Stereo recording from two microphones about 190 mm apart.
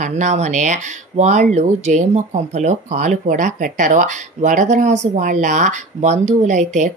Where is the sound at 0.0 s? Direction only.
40° right (ahead or behind).